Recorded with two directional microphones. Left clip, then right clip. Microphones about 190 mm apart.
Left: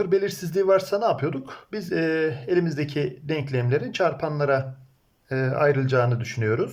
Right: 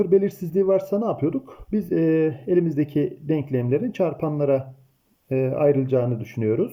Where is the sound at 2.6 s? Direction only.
40° right (ahead or behind).